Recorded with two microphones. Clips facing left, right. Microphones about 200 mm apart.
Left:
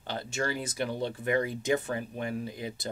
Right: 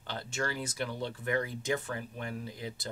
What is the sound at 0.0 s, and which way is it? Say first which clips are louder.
Speech: left 3 dB; 15° left (ahead or behind).